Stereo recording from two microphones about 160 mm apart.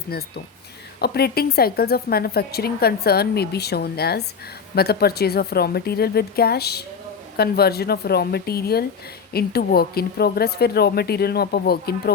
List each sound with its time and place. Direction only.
0.1 s a woman's voice: 75° left (ahead or behind); by 6.8 s 90° left
7.3 s a woman's voice: 75° left (ahead or behind)